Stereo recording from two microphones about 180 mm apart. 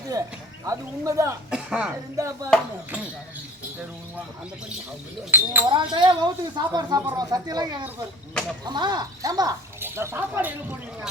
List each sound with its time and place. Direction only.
0.1 s speech: 20° right (ahead or behind)
1.5 s speech: 5° right (ahead or behind)
2.1 s speech: 20° right (ahead or behind)
5.3 s speech: 10° right (ahead or behind)
5.6 s speech: 25° right (ahead or behind)